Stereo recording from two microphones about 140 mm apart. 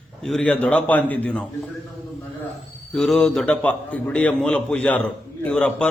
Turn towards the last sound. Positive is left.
turn(degrees=5)  # may be behind; listen again after turning